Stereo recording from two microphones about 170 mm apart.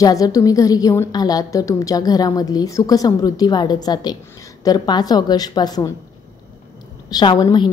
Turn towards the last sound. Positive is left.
turn(degrees=25)  # may be behind; listen again after turning